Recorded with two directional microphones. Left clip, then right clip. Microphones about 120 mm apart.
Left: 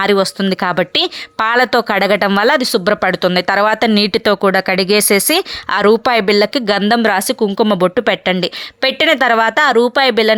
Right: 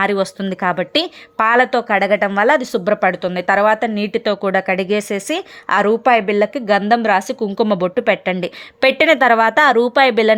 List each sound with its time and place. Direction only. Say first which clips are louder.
0.0 s speech: left 4 dB; 25° left (ahead or behind)
3.9 s speech: left 6 dB; 45° left (ahead or behind)
4.4 s speech: left 4 dB; 25° left (ahead or behind)
4.9 s speech: left 6 dB; 50° left (ahead or behind)
5.7 s a woman's voice: left 1 dB; 25° left (ahead or behind)